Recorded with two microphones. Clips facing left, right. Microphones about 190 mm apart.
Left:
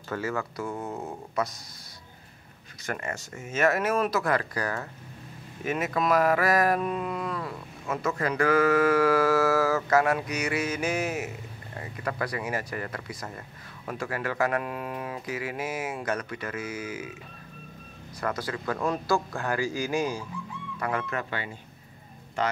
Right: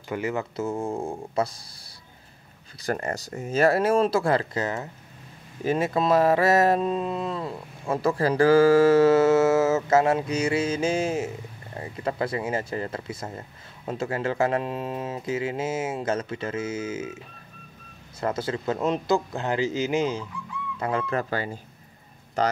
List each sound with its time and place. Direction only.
0.1 s mantra: 20° right (ahead or behind)
2.8 s speech: 35° right (ahead or behind)
5.6 s mantra: 30° right (ahead or behind)
18.2 s mantra: 25° right (ahead or behind)
20.8 s speech: 30° right (ahead or behind)